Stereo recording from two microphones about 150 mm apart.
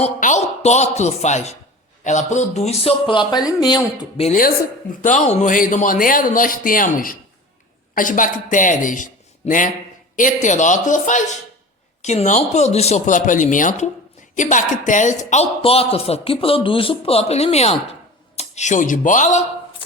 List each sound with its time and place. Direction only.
0.0 s speech: 55° left (ahead or behind); by 3.8 s 25° left (ahead or behind)
4.4 s speech: 65° left (ahead or behind)
9.4 s speech: 45° left (ahead or behind)
10.2 s speech: 55° left (ahead or behind)